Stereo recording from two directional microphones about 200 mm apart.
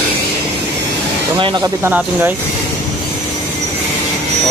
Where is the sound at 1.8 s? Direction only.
10° right (ahead or behind).